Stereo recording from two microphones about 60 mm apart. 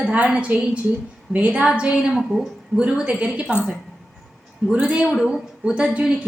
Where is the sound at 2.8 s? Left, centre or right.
Centre.